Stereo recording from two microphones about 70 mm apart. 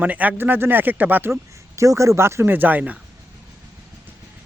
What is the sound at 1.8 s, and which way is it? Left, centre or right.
Speech, right.